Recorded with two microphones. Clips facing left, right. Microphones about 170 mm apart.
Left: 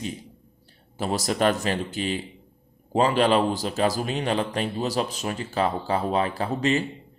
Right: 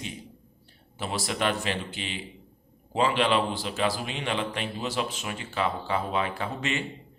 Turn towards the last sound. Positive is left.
turn(degrees=35)  # may be behind; listen again after turning